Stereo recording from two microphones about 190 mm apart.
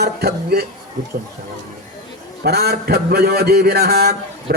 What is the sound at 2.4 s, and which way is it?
A man's voice, 55° right (ahead or behind).